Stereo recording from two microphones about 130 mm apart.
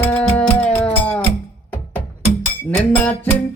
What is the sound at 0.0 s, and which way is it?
Music, 10° left (ahead or behind).